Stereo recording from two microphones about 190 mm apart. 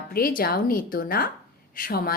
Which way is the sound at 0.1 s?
50° left (ahead or behind).